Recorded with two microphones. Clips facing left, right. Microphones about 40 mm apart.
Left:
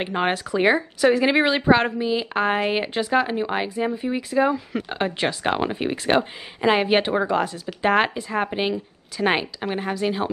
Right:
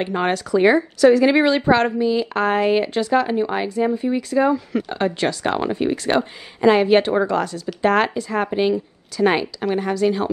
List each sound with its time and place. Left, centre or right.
0.0 s a woman's voice: centre